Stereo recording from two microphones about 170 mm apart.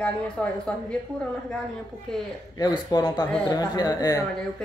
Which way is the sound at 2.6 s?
25° left (ahead or behind).